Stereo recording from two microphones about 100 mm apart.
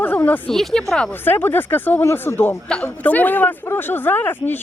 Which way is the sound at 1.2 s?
20° left (ahead or behind).